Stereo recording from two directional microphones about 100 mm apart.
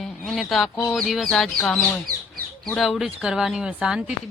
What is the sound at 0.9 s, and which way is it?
Speech, 5° left (ahead or behind).